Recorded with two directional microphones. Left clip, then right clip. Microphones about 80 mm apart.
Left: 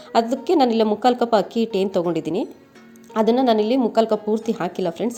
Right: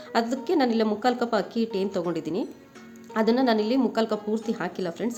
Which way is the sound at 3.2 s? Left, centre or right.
Left.